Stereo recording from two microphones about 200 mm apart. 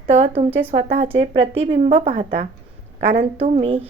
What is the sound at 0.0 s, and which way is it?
A woman's voice, 30° right (ahead or behind).